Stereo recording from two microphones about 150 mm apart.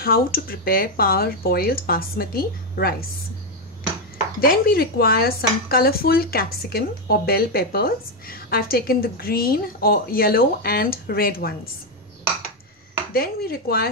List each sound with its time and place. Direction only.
0.0 s speech: 85° left
4.4 s speech: 85° left
13.1 s speech: 90° left